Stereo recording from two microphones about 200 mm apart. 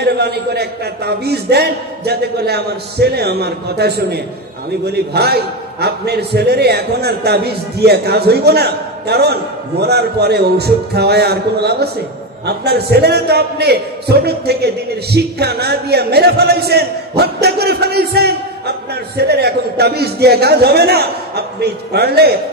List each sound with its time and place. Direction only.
0.0 s a man's voice: 55° right (ahead or behind)